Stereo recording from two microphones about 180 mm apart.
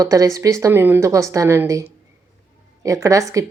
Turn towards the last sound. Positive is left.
turn(degrees=-15)  # may be behind; listen again after turning